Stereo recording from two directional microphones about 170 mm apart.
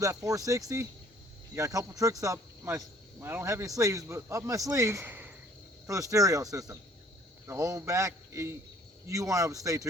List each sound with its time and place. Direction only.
0.0 s speech: 20° right (ahead or behind)